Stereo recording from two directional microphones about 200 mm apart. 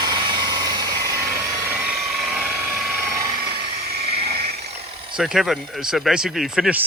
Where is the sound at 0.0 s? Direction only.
25° right (ahead or behind).